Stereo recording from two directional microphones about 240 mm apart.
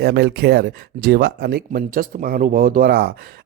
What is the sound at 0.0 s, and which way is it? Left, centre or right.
Speech, right.